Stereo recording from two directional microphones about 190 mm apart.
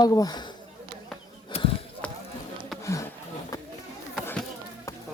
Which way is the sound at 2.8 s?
15° left (ahead or behind).